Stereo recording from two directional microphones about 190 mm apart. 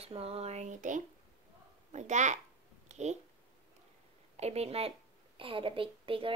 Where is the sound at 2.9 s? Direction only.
35° right (ahead or behind).